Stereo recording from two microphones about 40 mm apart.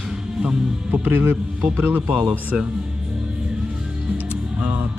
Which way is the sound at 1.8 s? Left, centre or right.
Right.